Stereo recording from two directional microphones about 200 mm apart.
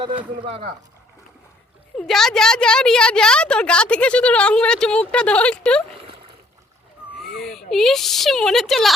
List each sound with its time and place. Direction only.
0.0 s speech: 25° right (ahead or behind)
2.0 s a woman's voice: centre (ahead or behind)
7.2 s a woman's voice: centre (ahead or behind)